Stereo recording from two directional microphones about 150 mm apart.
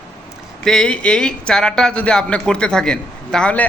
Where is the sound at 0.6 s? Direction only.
5° left (ahead or behind).